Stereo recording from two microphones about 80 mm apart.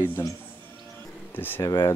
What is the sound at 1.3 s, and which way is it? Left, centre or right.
Speech, left.